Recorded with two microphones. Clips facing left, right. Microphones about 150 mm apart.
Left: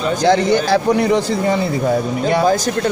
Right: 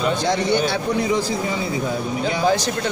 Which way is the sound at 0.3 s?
85° left.